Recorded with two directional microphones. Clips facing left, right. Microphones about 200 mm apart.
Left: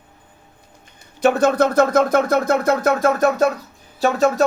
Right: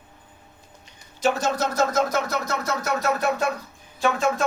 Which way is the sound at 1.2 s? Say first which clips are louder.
Left 8 dB; 60° left (ahead or behind).